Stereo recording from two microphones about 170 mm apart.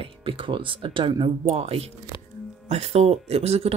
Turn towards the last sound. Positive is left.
turn(degrees=-35)  # may be behind; listen again after turning